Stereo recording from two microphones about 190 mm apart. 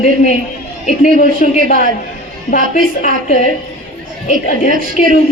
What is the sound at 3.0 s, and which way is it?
A woman's voice, 40° left (ahead or behind).